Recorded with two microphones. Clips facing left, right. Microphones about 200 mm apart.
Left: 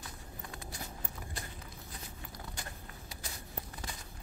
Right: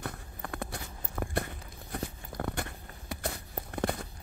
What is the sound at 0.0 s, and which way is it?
Walk, 60° right (ahead or behind).